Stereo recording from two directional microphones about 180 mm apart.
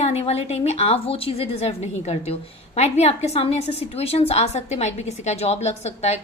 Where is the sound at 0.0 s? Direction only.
35° left (ahead or behind).